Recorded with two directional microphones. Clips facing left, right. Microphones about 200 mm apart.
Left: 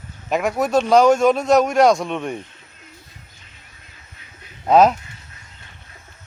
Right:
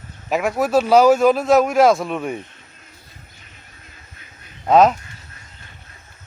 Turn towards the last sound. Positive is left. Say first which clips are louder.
# even
turn(degrees=0)  # may be behind; listen again after turning